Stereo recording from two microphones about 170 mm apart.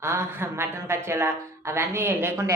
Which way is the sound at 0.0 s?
15° right (ahead or behind).